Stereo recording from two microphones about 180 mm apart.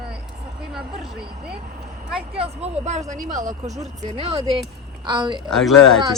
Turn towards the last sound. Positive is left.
turn(degrees=0)  # may be behind; listen again after turning